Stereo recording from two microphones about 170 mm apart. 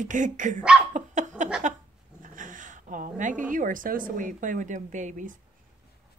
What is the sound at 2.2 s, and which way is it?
Speech, 50° right (ahead or behind).